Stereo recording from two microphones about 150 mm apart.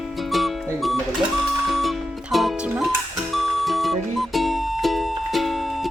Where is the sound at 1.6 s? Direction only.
Centre (ahead or behind).